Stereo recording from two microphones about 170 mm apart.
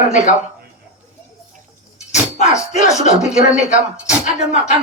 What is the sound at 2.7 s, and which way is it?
Speech, 45° left (ahead or behind).